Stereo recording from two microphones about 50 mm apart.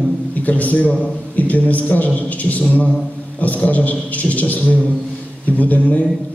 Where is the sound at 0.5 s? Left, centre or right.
Left.